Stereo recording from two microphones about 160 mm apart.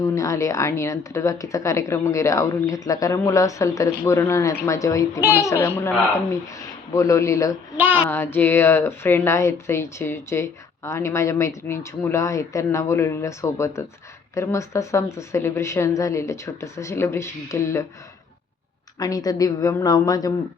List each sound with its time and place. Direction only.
0.0 s speech: 20° left (ahead or behind)
7.8 s a child's voice: 10° right (ahead or behind)
8.0 s speech: 15° left (ahead or behind)
18.9 s speech: 20° left (ahead or behind)